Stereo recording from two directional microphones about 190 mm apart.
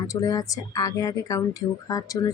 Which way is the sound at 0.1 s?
20° left (ahead or behind).